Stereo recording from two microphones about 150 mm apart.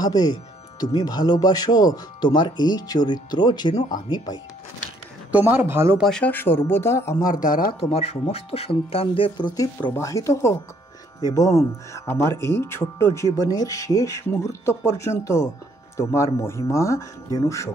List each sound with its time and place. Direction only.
0.0 s speech: 25° left (ahead or behind)
5.3 s speech: 15° right (ahead or behind)
5.9 s speech: 5° left (ahead or behind)
7.2 s speech: 65° left (ahead or behind)
7.9 s speech: 45° left (ahead or behind)
9.9 s speech: 20° left (ahead or behind)